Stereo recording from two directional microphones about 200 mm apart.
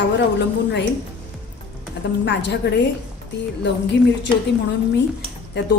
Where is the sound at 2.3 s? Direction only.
60° left (ahead or behind).